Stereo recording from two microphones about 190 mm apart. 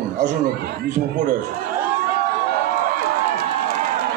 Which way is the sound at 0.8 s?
40° right (ahead or behind).